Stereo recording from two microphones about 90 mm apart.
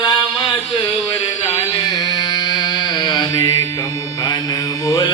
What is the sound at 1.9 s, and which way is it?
Mantra, 55° left (ahead or behind).